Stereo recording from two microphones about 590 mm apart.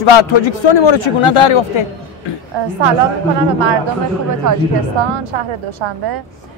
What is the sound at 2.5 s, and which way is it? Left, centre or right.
Speech, right.